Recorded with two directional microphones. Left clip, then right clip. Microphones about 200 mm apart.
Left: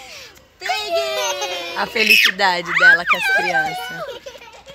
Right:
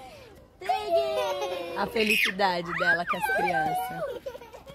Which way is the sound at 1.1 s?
10° left (ahead or behind).